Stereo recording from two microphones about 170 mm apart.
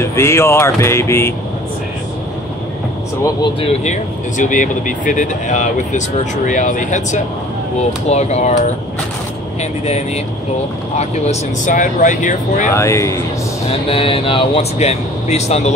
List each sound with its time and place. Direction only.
0.0 s speech: 15° left (ahead or behind)
3.6 s speech: 45° left (ahead or behind)
12.7 s speech: 15° left (ahead or behind)
13.7 s speech: 35° left (ahead or behind)